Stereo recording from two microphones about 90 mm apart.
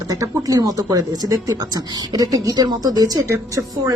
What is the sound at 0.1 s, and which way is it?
A woman's voice, 40° right (ahead or behind).